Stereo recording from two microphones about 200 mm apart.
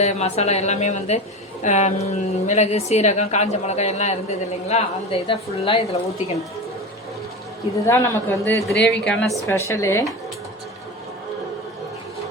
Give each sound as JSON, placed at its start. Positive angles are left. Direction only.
{"t": 0.0, "sound": "a woman's voice", "side_deg": 30}
{"t": 7.9, "sound": "a man's voice", "side_deg": 15}